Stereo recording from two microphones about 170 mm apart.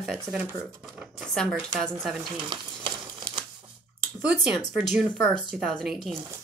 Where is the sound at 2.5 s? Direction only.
25° right (ahead or behind).